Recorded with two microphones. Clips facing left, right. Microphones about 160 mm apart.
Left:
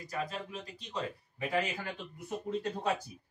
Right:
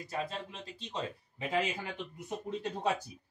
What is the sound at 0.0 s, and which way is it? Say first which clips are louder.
Speech: even; 25° right (ahead or behind).